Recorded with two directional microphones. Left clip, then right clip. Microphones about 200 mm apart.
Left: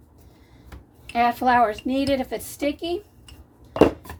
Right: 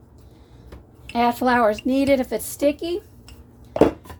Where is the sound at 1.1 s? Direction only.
25° right (ahead or behind).